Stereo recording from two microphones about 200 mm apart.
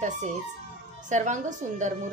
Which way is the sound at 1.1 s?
40° right (ahead or behind).